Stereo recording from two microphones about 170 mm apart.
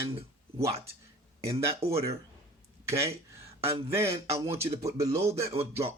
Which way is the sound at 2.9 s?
15° right (ahead or behind).